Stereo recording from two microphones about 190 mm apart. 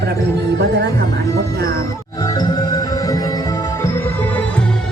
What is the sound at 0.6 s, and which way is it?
Music, 60° right (ahead or behind).